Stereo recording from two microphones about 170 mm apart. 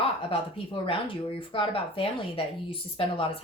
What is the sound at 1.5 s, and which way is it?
A woman's voice, 35° left (ahead or behind).